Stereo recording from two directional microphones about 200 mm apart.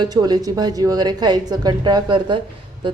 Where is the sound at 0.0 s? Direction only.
20° right (ahead or behind).